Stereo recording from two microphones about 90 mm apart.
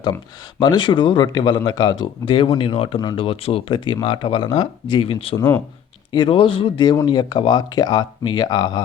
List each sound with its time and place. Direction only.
0.6 s speech: 55° left (ahead or behind)
2.0 s speech: 65° left (ahead or behind); by 5.4 s 90° left
5.4 s speech: 30° left (ahead or behind)
6.1 s speech: 65° left (ahead or behind)
6.9 s speech: 50° left (ahead or behind)